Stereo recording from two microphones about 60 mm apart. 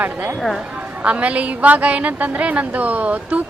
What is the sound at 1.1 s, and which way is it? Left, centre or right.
A woman's voice, right.